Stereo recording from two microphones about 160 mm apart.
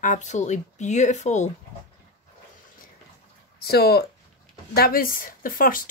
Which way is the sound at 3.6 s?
75° left (ahead or behind).